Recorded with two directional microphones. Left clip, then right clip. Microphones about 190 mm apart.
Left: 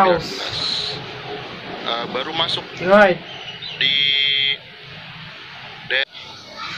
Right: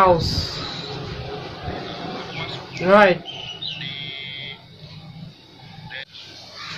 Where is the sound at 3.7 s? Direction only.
45° left (ahead or behind).